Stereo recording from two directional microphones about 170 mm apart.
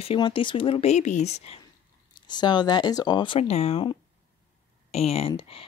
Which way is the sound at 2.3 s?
25° left (ahead or behind).